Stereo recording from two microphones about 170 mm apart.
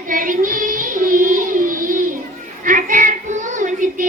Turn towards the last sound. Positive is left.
turn(degrees=-50)  # may be behind; listen again after turning